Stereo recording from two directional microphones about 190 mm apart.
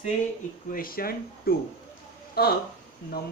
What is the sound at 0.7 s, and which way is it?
Speech, 50° left (ahead or behind).